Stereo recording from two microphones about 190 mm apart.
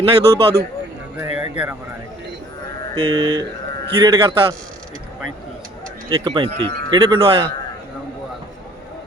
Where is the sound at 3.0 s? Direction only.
25° right (ahead or behind).